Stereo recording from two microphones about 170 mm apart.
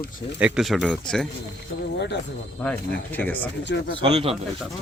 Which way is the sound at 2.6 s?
10° left (ahead or behind).